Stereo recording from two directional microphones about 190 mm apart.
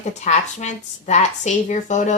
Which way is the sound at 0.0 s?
40° left (ahead or behind).